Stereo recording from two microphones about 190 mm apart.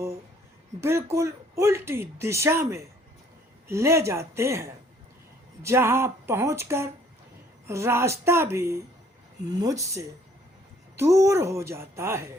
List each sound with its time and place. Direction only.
0.8 s speech: 15° right (ahead or behind)